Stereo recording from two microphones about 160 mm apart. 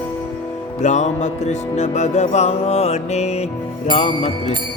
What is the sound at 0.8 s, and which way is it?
Music, 45° left (ahead or behind).